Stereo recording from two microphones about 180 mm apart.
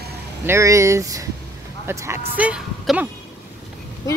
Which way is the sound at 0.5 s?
15° right (ahead or behind).